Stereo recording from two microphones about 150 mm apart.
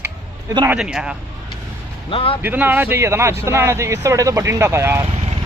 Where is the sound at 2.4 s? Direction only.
15° right (ahead or behind).